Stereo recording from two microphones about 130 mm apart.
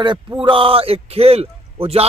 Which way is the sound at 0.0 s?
35° right (ahead or behind).